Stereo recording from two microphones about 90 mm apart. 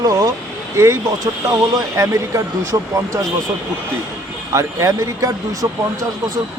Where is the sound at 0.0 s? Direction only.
45° right (ahead or behind).